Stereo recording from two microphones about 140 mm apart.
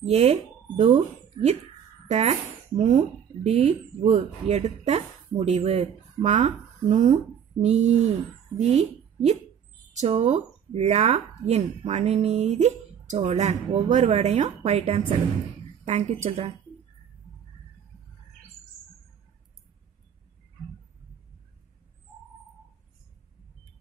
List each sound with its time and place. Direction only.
0.0 s speech: 50° right (ahead or behind)
7.6 s a woman's voice: 50° right (ahead or behind)